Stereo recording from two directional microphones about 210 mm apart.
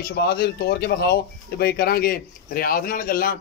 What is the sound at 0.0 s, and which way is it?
Speech, 50° left (ahead or behind).